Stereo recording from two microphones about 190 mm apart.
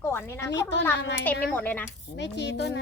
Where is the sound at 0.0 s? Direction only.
10° left (ahead or behind).